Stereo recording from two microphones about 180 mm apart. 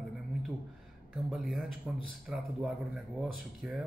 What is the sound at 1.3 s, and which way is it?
Speech, centre (ahead or behind).